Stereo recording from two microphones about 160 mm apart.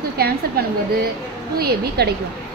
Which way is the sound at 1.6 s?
85° right.